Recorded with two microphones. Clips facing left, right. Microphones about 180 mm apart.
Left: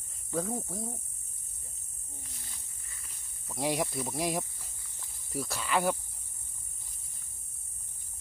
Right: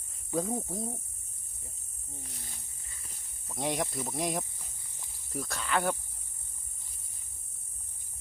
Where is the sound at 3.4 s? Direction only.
5° left (ahead or behind).